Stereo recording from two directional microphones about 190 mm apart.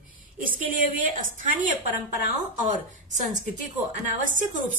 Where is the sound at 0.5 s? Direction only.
45° right (ahead or behind).